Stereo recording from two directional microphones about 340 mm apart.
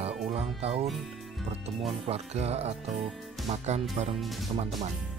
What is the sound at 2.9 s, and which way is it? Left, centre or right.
Speech, centre.